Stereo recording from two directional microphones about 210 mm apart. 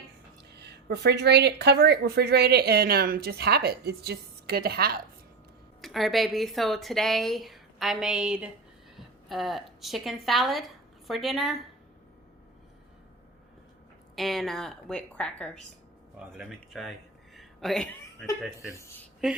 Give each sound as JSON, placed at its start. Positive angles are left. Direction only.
{"t": 0.6, "sound": "a woman's voice", "side_deg": -55}
{"t": 5.8, "sound": "speech", "side_deg": 0}
{"t": 14.2, "sound": "speech", "side_deg": 0}
{"t": 17.3, "sound": "a sound", "side_deg": 0}